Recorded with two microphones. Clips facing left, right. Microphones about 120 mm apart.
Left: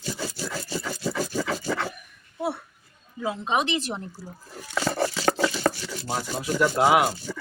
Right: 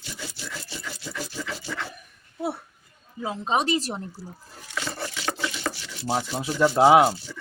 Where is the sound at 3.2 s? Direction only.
35° right (ahead or behind).